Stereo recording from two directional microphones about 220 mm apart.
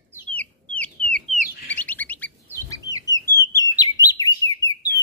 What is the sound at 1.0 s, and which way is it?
Chicken, 25° right (ahead or behind).